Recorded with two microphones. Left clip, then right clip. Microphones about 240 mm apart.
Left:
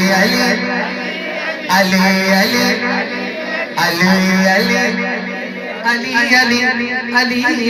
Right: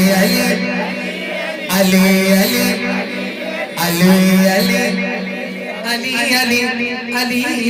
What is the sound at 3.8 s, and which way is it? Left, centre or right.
Speech, right.